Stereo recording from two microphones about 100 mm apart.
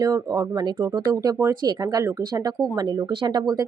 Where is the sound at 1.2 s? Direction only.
35° right (ahead or behind).